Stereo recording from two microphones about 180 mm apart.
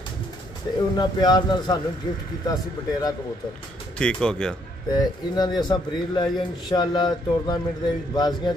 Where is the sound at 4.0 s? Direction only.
5° left (ahead or behind).